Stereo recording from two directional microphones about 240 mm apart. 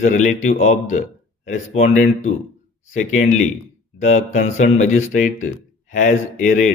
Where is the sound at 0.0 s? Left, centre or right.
Left.